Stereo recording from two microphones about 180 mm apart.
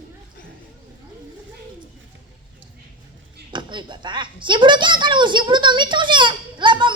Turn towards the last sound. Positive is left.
turn(degrees=-25)  # may be behind; listen again after turning